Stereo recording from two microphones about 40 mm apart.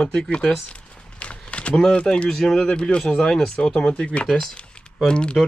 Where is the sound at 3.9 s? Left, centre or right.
Left.